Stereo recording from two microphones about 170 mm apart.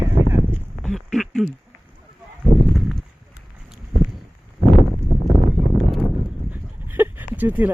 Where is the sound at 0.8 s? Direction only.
Centre (ahead or behind).